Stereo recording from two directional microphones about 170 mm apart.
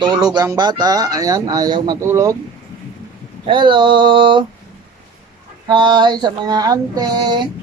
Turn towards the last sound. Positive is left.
turn(degrees=-25)  # may be behind; listen again after turning